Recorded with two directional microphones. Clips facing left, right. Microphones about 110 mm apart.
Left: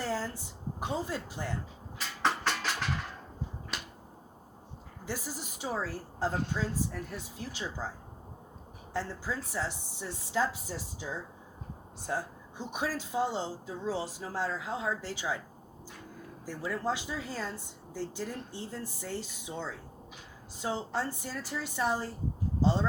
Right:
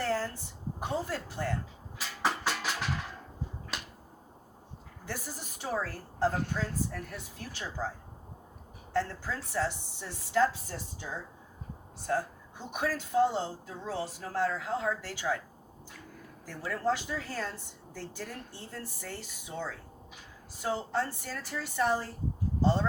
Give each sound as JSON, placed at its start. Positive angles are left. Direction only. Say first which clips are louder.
{"t": 0.0, "sound": "a sound", "louder": "right 2 dB", "side_deg": 15}
{"t": 0.9, "sound": "speech", "louder": "right 1 dB", "side_deg": 15}
{"t": 2.0, "sound": "music", "louder": "left 1 dB", "side_deg": -5}
{"t": 5.0, "sound": "speech", "louder": "left 2 dB", "side_deg": 15}
{"t": 8.9, "sound": "speech", "louder": "right 3 dB", "side_deg": 15}
{"t": 12.0, "sound": "speech", "louder": "right 3 dB", "side_deg": 15}
{"t": 16.5, "sound": "speech", "louder": "right 2 dB", "side_deg": 15}